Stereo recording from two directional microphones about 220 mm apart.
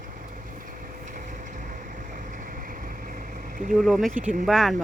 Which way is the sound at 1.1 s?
35° right (ahead or behind).